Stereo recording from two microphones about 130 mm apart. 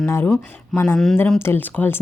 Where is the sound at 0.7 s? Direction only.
Centre (ahead or behind).